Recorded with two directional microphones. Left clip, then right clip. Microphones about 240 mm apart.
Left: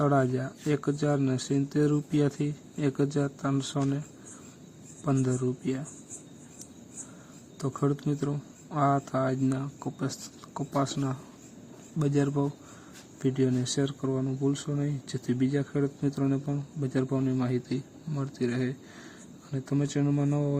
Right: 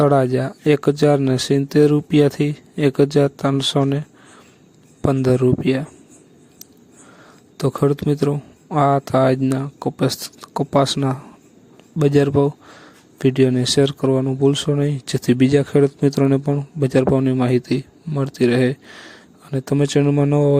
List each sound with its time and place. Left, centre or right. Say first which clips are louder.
0.0 s speech: right 11 dB; right
5.0 s speech: right 13 dB; right
7.6 s speech: right 12 dB; right